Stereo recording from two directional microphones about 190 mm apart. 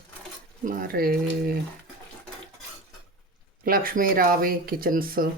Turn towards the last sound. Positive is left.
turn(degrees=-50)  # may be behind; listen again after turning